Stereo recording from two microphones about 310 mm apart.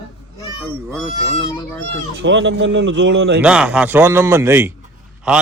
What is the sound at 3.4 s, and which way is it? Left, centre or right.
A man's voice, centre.